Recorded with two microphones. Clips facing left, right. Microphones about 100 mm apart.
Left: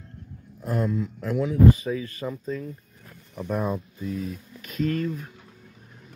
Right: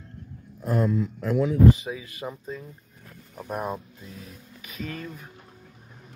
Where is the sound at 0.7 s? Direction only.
55° right (ahead or behind).